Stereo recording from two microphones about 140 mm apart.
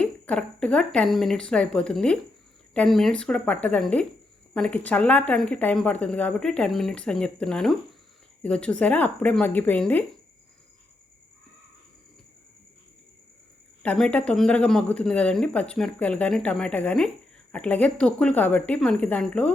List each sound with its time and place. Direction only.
0.0 s a woman's voice: 10° left (ahead or behind)
13.8 s a woman's voice: 10° left (ahead or behind)